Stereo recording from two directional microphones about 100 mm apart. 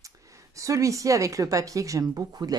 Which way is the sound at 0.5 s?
30° right (ahead or behind).